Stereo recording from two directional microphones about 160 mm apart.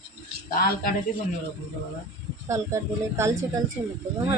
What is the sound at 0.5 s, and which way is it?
Speech, 70° left (ahead or behind).